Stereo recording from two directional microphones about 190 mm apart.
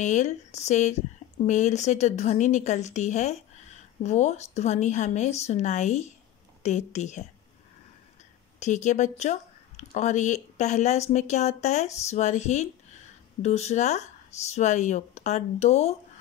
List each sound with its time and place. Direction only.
0.0 s speech: 40° left (ahead or behind)
8.5 s speech: 40° left (ahead or behind)